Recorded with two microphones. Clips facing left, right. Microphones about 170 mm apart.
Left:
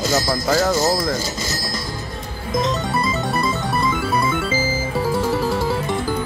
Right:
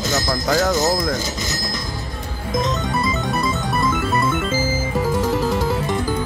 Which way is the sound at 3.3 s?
Centre (ahead or behind).